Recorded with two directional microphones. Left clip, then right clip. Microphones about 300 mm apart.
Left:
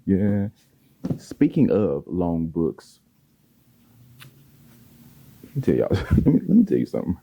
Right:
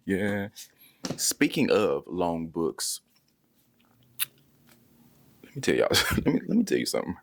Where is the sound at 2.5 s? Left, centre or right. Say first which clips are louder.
Left 4 dB; centre.